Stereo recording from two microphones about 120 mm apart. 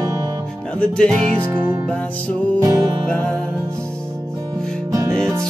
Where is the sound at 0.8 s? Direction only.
5° left (ahead or behind).